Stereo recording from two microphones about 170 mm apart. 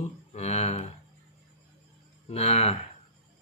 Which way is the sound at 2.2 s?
40° left (ahead or behind).